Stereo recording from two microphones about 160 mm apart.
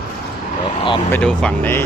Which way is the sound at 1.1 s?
5° left (ahead or behind).